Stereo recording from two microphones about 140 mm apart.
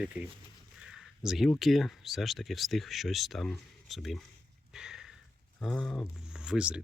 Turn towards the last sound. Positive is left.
turn(degrees=-10)  # may be behind; listen again after turning